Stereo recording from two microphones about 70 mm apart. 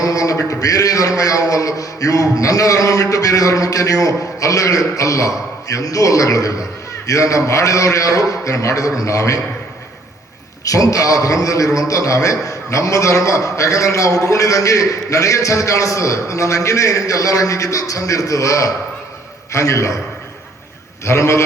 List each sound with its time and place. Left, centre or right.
0.0 s a man's voice: left
10.7 s a man's voice: left
21.0 s a man's voice: left